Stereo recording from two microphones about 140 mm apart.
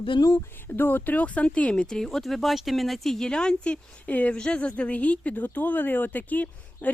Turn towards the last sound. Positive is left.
turn(degrees=10)  # may be behind; listen again after turning